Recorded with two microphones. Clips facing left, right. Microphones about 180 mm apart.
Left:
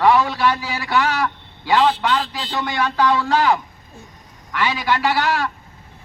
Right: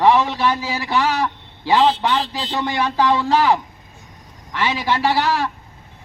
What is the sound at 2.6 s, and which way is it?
Speech, 20° right (ahead or behind).